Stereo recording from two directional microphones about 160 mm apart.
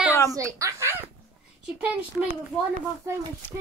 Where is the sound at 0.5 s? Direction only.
20° right (ahead or behind).